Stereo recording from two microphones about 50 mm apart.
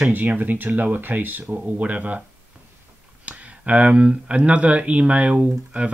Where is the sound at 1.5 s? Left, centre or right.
Right.